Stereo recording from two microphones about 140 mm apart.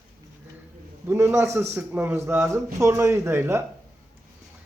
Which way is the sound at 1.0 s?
20° right (ahead or behind).